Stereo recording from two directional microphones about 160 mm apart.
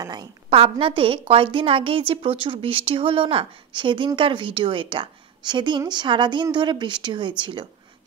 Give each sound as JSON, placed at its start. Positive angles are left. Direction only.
{"t": 0.0, "sound": "a woman's voice", "side_deg": -25}